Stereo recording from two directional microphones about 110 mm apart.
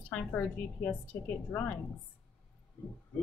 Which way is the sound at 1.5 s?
15° left (ahead or behind).